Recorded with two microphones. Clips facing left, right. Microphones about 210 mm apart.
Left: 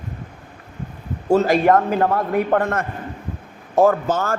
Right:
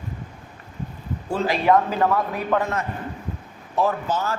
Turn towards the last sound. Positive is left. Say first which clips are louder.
# left 6 dB
turn(degrees=50)  # may be behind; listen again after turning